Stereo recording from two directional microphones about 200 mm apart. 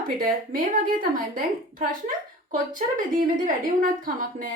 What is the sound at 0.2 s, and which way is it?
A woman's voice, 45° right (ahead or behind).